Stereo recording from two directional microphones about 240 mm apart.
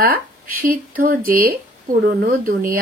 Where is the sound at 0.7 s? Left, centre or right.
Right.